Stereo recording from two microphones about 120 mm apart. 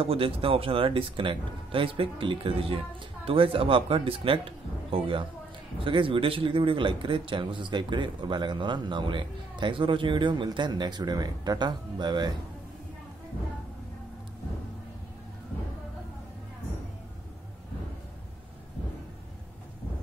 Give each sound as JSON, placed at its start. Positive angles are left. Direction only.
{"t": 0.0, "sound": "speech", "side_deg": -50}